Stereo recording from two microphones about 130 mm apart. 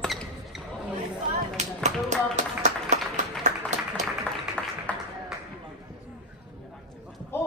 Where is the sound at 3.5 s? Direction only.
65° right (ahead or behind).